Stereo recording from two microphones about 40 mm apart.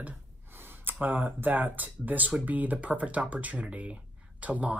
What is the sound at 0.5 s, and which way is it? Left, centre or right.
Speech, right.